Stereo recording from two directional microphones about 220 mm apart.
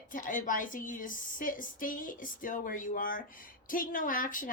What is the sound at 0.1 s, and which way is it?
A woman's voice, 35° left (ahead or behind).